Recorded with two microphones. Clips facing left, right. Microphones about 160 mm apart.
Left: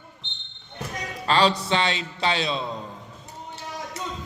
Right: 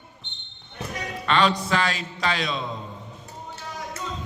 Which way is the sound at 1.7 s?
25° left (ahead or behind).